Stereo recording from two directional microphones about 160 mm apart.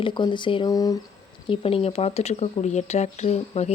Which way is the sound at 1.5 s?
35° left (ahead or behind).